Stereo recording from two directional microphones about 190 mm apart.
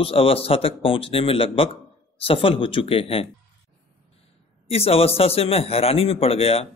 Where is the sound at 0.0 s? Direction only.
30° left (ahead or behind).